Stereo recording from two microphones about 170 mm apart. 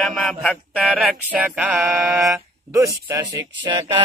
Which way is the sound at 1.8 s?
15° right (ahead or behind).